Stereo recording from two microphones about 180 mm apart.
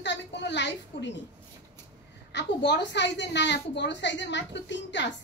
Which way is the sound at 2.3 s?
75° left (ahead or behind).